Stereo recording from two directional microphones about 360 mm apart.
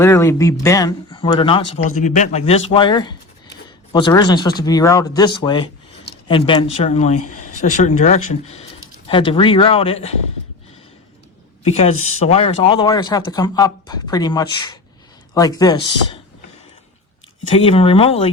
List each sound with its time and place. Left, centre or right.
0.0 s speech: centre
11.6 s speech: centre
17.5 s speech: centre